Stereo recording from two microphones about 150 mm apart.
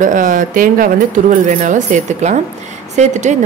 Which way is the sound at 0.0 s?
60° right (ahead or behind).